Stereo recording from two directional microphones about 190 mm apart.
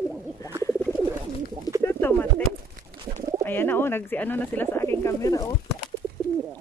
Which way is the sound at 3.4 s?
10° left (ahead or behind).